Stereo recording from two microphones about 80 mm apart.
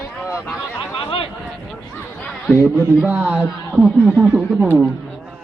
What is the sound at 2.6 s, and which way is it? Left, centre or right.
Speech, right.